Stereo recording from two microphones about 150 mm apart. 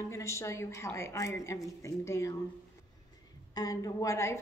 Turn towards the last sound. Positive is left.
turn(degrees=20)  # may be behind; listen again after turning